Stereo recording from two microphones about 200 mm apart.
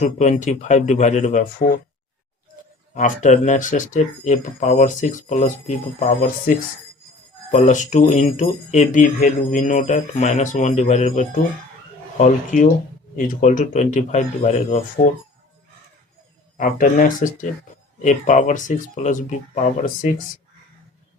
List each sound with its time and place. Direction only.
0.0 s speech: 35° left (ahead or behind)
2.9 s speech: 40° left (ahead or behind)
7.5 s speech: 40° left (ahead or behind)
16.6 s speech: 40° left (ahead or behind)